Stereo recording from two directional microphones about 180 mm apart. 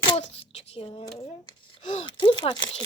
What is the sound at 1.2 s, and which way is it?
Speech, 30° left (ahead or behind).